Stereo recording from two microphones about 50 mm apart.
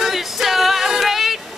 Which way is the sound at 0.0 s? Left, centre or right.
Centre.